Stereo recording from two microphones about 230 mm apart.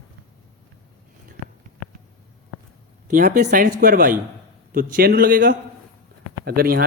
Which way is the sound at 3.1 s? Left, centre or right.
Right.